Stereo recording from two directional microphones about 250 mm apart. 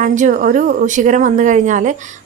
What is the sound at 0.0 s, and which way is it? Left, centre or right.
A woman's voice, right.